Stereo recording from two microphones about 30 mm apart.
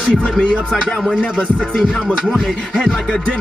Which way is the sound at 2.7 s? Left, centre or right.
Left.